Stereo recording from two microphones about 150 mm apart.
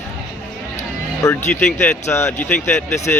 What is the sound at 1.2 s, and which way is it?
Speech, 15° left (ahead or behind).